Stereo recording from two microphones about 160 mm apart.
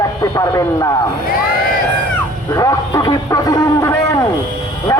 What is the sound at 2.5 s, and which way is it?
A man's voice, 20° left (ahead or behind).